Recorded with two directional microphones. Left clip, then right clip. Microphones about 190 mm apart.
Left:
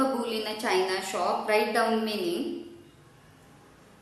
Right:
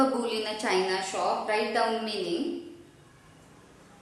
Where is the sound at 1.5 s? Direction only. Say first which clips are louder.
Left 2 dB; 20° left (ahead or behind).